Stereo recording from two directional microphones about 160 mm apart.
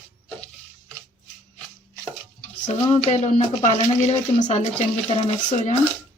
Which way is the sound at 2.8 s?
40° left (ahead or behind).